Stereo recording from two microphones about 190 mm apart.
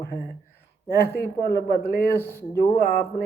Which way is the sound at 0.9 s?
50° left (ahead or behind).